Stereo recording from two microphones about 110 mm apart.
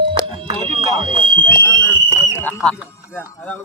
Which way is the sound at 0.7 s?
50° right (ahead or behind).